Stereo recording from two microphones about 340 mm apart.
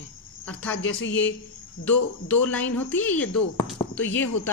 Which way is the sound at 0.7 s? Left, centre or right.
Left.